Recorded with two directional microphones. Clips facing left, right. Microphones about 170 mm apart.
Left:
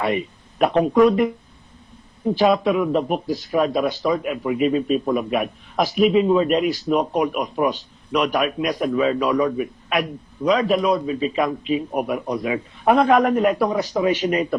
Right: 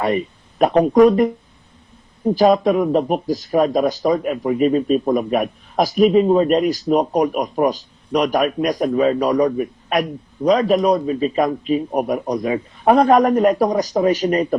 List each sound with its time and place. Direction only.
0.0 s speech: 40° right (ahead or behind)